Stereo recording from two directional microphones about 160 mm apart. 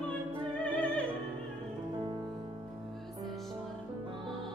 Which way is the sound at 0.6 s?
5° left (ahead or behind).